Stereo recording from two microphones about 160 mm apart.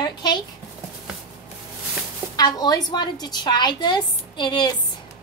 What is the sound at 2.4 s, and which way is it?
A woman's voice, 25° left (ahead or behind).